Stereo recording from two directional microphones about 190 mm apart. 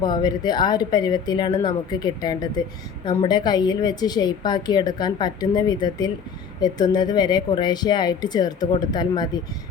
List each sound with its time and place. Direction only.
0.0 s a woman's voice: 20° left (ahead or behind)